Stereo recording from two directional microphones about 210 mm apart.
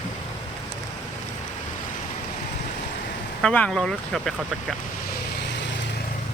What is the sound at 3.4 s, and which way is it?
Speech, 5° left (ahead or behind).